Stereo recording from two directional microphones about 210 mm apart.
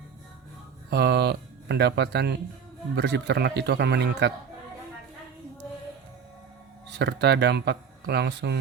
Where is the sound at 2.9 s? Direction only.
55° right (ahead or behind).